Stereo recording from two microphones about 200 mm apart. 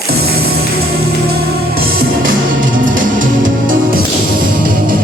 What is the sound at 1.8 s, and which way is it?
Music, 45° right (ahead or behind).